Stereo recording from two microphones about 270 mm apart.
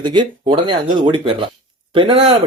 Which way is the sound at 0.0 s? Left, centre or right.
Centre.